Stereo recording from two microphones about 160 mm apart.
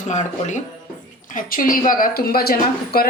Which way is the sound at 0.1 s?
50° left (ahead or behind).